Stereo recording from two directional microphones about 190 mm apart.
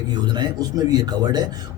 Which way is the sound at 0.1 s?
20° right (ahead or behind).